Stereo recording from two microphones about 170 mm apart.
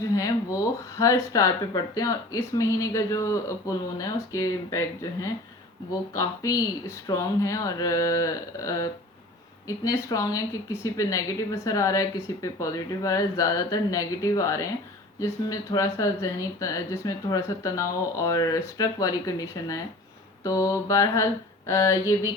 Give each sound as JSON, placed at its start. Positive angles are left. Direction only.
{"t": 0.0, "sound": "a woman's voice", "side_deg": 20}
{"t": 6.1, "sound": "a woman's voice", "side_deg": 20}